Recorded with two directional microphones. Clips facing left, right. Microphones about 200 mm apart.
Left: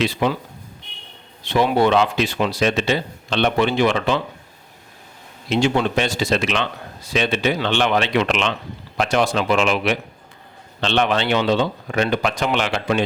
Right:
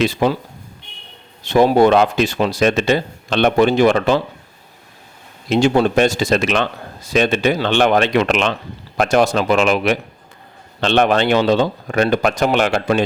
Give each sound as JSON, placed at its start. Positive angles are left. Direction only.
{"t": 0.0, "sound": "a man's voice", "side_deg": -40}
{"t": 1.5, "sound": "a man's voice", "side_deg": -45}
{"t": 5.5, "sound": "a man's voice", "side_deg": -40}